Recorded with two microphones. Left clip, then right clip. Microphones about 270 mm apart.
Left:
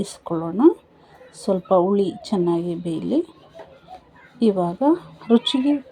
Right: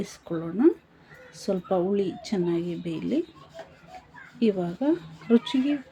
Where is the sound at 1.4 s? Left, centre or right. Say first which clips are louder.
Left 8 dB; centre.